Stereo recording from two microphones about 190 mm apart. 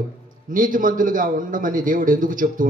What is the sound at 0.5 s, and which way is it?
A man's voice, 45° right (ahead or behind).